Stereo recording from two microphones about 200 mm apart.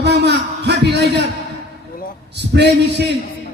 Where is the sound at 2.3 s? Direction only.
55° right (ahead or behind).